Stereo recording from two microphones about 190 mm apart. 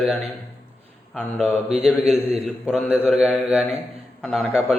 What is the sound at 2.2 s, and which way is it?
A man's voice, 5° left (ahead or behind).